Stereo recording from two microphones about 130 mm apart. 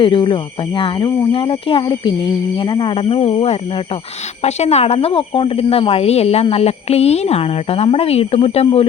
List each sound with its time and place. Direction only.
0.0 s speech: 40° left (ahead or behind)
4.4 s speech: 55° left (ahead or behind)